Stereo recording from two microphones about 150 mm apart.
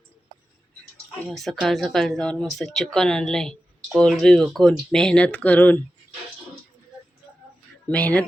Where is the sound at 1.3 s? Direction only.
Centre (ahead or behind).